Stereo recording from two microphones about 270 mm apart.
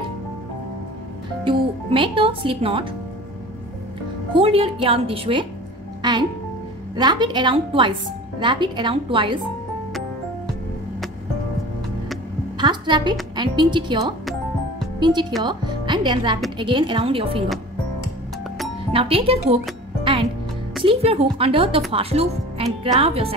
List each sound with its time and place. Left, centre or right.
1.4 s speech: centre
4.3 s a woman's voice: centre
12.5 s a sound: centre
13.4 s a woman's voice: centre
18.9 s speech: centre
20.0 s music: right
20.8 s a woman's voice: right